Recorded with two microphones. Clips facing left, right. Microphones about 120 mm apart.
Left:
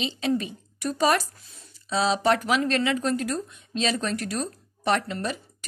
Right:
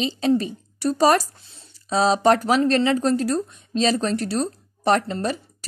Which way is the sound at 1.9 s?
40° right (ahead or behind).